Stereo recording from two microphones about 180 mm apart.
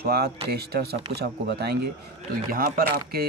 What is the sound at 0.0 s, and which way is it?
Speech, 60° right (ahead or behind).